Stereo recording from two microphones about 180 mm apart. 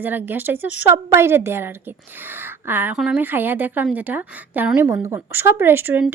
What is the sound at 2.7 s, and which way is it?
A woman's voice, 10° right (ahead or behind).